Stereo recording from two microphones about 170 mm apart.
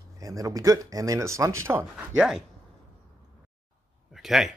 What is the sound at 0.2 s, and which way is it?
Speech, 20° right (ahead or behind).